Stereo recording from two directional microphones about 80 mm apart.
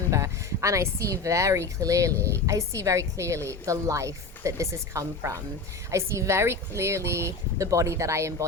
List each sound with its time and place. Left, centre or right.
0.1 s speech: right